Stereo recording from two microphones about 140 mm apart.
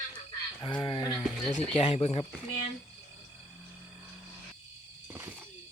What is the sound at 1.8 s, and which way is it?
Speech, 50° left (ahead or behind).